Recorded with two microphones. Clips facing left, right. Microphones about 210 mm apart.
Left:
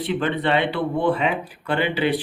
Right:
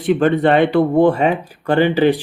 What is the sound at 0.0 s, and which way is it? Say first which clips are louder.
Speech: right 9 dB; 45° right (ahead or behind).